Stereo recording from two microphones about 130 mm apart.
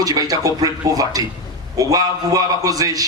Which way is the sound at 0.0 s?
30° right (ahead or behind).